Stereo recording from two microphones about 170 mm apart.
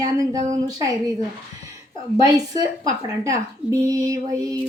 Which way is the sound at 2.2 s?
20° right (ahead or behind).